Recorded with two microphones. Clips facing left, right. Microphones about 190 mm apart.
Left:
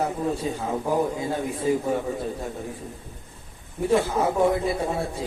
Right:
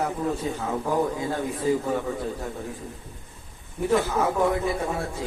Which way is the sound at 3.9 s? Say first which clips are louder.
Left 1 dB; 30° left (ahead or behind).